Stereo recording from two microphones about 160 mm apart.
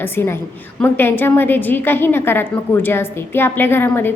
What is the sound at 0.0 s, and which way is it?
A woman's voice, 15° left (ahead or behind).